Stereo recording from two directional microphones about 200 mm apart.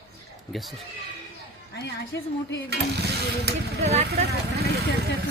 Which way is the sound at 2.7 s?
55° right (ahead or behind).